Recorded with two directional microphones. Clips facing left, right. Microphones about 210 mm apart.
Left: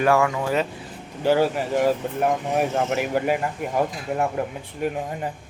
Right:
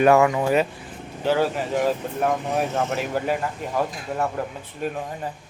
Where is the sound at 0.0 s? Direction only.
20° right (ahead or behind).